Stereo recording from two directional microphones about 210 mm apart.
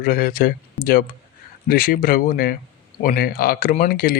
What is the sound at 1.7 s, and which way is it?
Speech, 40° left (ahead or behind).